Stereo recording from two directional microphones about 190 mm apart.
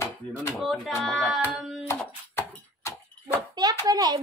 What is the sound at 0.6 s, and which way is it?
Speech, centre (ahead or behind).